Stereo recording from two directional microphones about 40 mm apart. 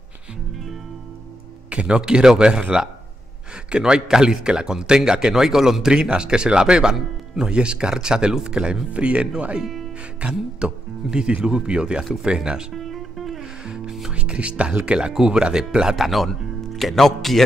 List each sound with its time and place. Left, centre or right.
1.7 s a man's voice: right
12.7 s music: centre
13.4 s music: right
14.1 s a man's voice: right
16.0 s speech: centre